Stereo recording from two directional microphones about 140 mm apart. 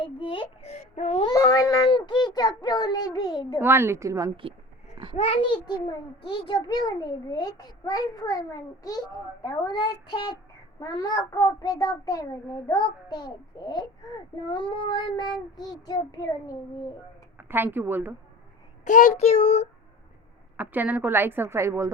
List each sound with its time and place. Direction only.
0.0 s a sound: 35° left (ahead or behind); by 1.2 s 55° left (ahead or behind)
1.2 s a child's voice: 25° left (ahead or behind)
3.6 s a woman's voice: 15° right (ahead or behind)
5.1 s a child's voice: 45° left (ahead or behind); by 9.0 s 25° left (ahead or behind)
9.4 s child singing: 30° left (ahead or behind)
10.8 s a child's voice: 25° left (ahead or behind)
14.4 s child singing: 35° left (ahead or behind)
17.3 s a woman's voice: 15° right (ahead or behind)
18.9 s a child's voice: 65° left (ahead or behind); by 19.6 s 45° left (ahead or behind)
20.6 s a woman's voice: 10° right (ahead or behind)